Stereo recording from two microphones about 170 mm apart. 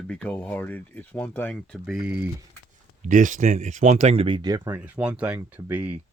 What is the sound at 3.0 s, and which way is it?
Speech, 50° right (ahead or behind).